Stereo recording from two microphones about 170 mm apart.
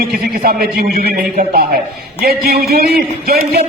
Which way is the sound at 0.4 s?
60° right (ahead or behind).